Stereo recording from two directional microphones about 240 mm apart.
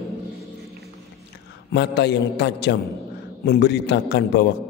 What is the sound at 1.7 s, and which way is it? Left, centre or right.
A man's voice, left.